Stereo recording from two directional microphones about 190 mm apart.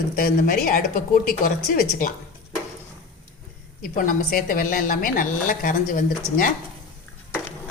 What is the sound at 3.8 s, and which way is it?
A woman's voice, 45° left (ahead or behind).